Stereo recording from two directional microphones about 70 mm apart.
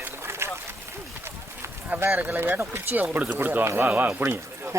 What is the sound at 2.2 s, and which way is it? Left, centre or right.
Speech, right.